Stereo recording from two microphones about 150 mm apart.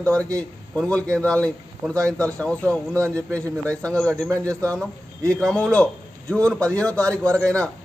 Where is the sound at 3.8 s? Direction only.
10° left (ahead or behind).